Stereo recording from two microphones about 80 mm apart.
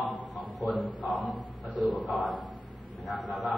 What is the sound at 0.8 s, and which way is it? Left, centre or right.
Speech, left.